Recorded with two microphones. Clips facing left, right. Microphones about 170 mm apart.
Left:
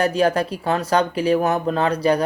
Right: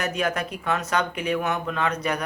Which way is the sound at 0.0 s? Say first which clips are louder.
Left 8 dB; 30° left (ahead or behind).